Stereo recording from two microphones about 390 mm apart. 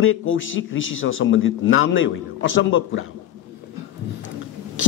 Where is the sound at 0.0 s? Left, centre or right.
Left.